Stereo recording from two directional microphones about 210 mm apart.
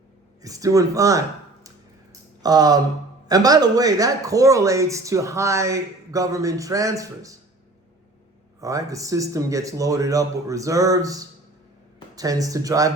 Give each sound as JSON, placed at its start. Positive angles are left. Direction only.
{"t": 0.4, "sound": "speech", "side_deg": -15}
{"t": 2.4, "sound": "speech", "side_deg": -15}
{"t": 8.6, "sound": "speech", "side_deg": -15}